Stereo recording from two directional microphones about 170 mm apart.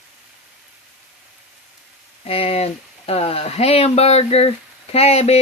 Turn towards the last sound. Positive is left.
turn(degrees=35)  # may be behind; listen again after turning